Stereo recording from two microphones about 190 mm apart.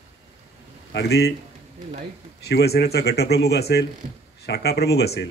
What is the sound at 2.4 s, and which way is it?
Speech, 60° left (ahead or behind).